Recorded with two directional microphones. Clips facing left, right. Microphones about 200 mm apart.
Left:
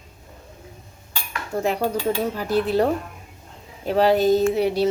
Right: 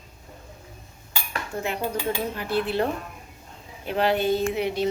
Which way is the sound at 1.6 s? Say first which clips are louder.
Left 6 dB; 35° left (ahead or behind).